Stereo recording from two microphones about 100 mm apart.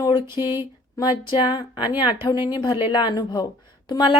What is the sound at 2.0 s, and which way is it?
A woman's voice, 55° left (ahead or behind).